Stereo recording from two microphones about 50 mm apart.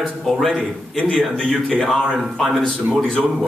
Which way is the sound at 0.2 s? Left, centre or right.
Centre.